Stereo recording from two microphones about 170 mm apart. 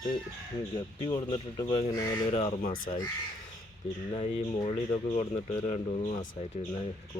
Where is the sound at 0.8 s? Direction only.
30° left (ahead or behind).